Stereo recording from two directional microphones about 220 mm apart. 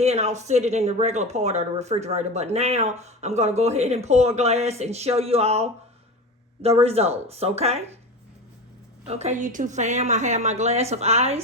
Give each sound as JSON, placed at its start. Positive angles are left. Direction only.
{"t": 0.0, "sound": "speech", "side_deg": -30}
{"t": 9.0, "sound": "a woman's voice", "side_deg": -30}